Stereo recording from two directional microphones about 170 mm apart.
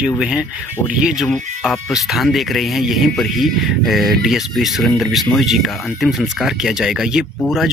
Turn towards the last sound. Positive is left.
turn(degrees=-5)  # may be behind; listen again after turning